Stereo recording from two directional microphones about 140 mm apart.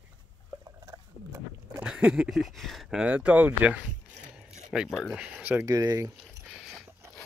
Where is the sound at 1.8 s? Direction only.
5° right (ahead or behind).